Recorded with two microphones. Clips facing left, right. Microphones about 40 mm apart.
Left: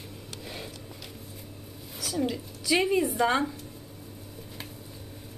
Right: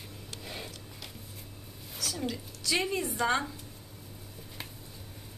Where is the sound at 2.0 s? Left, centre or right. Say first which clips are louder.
Left 5 dB; centre.